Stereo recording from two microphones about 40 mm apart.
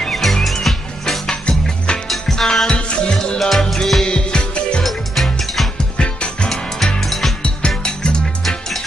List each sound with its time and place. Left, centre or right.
0.1 s music: centre
1.3 s music: left
2.3 s music: centre
3.3 s music: centre
4.0 s music: left
4.8 s music: centre
5.9 s music: left
7.0 s music: centre
7.4 s music: left
8.5 s music: centre